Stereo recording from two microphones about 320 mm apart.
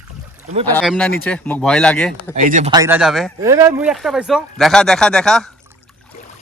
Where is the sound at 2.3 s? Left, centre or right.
Right; by 5.5 s centre.